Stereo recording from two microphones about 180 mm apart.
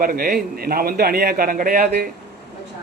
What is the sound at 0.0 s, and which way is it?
A man's voice, 55° right (ahead or behind).